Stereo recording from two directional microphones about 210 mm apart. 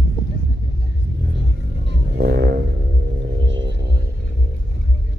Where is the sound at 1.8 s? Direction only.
55° right (ahead or behind).